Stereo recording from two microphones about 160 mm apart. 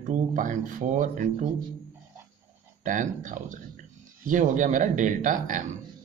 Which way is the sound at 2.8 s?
55° right (ahead or behind).